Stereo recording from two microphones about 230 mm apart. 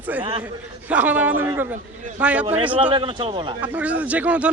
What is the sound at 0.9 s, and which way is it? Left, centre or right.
A man's voice, centre.